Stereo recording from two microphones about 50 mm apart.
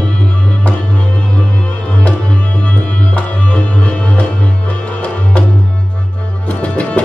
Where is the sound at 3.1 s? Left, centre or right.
Left.